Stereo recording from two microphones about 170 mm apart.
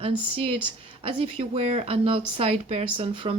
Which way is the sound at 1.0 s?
30° right (ahead or behind).